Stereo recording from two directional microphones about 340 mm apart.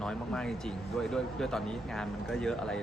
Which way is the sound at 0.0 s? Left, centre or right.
Centre.